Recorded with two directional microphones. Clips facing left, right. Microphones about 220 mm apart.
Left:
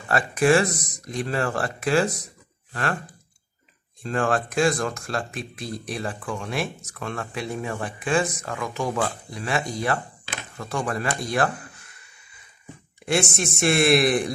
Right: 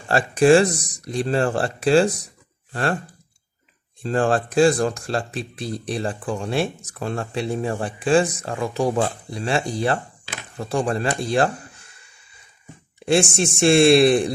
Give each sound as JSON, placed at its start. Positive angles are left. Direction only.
{"t": 0.1, "sound": "speech", "side_deg": -30}
{"t": 4.0, "sound": "speech", "side_deg": -35}
{"t": 13.0, "sound": "speech", "side_deg": -30}